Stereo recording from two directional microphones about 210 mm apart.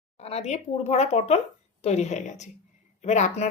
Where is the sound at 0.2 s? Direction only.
30° left (ahead or behind).